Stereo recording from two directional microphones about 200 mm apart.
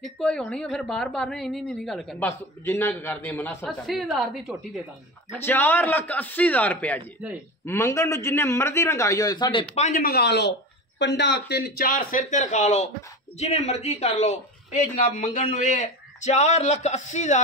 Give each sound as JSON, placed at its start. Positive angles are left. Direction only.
{"t": 0.0, "sound": "speech", "side_deg": 5}
{"t": 2.2, "sound": "a man's voice", "side_deg": 15}
{"t": 9.8, "sound": "a man's voice", "side_deg": 45}